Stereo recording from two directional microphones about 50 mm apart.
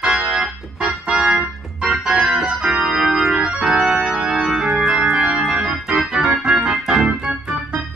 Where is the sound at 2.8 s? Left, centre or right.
Centre.